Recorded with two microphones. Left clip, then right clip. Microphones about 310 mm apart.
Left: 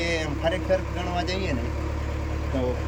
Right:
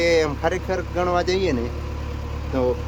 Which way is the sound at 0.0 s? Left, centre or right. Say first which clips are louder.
Right 7 dB; centre.